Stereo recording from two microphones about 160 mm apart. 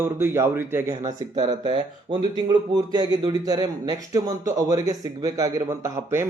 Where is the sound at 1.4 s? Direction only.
30° right (ahead or behind).